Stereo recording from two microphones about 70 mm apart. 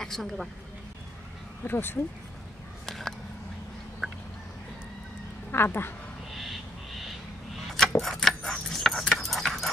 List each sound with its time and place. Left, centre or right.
0.0 s a woman's voice: centre
1.6 s speech: left
2.9 s a sound: centre
5.5 s speech: left
6.3 s owl: centre
7.7 s keys jangling: centre